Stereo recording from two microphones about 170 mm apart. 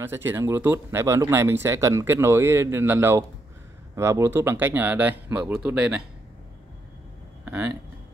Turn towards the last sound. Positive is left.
turn(degrees=-15)  # may be behind; listen again after turning